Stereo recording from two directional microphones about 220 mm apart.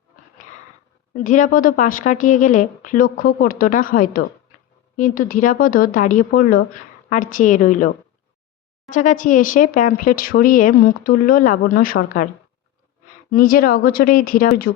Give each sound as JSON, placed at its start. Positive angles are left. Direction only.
{"t": 1.1, "sound": "speech", "side_deg": 35}
{"t": 13.3, "sound": "speech", "side_deg": 40}